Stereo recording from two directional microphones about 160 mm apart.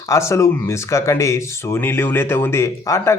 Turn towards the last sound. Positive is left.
turn(degrees=15)  # may be behind; listen again after turning